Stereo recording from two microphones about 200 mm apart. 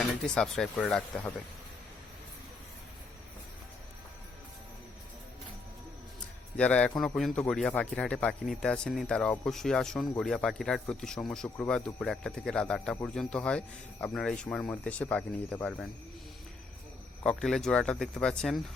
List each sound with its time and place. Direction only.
0.2 s a man's voice: 5° left (ahead or behind)
6.6 s a man's voice: 5° left (ahead or behind)
17.2 s a man's voice: centre (ahead or behind)